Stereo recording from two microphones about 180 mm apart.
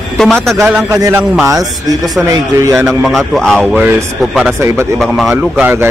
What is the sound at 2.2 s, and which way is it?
Speech, 15° right (ahead or behind).